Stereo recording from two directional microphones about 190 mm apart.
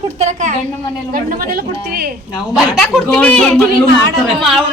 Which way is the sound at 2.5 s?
5° right (ahead or behind).